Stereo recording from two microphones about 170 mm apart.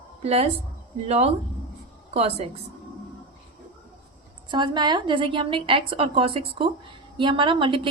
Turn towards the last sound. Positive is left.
turn(degrees=-30)  # may be behind; listen again after turning